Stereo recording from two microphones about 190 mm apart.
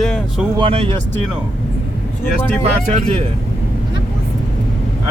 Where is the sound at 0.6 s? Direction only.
30° right (ahead or behind).